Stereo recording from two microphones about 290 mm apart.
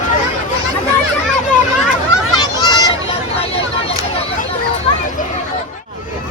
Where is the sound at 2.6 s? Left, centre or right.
Centre.